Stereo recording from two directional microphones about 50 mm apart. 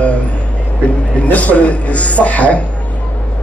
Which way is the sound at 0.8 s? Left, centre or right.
Left.